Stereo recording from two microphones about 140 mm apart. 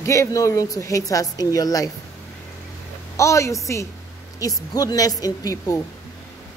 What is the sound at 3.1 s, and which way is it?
A woman's voice, 20° left (ahead or behind).